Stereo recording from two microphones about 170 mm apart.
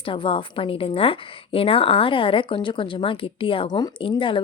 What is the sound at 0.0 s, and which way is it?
A woman's voice, 30° left (ahead or behind).